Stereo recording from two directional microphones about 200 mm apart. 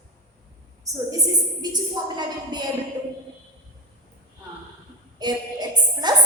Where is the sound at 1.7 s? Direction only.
20° right (ahead or behind).